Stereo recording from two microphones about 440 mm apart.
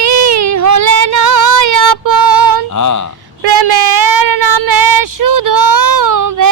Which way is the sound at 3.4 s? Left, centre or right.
Right.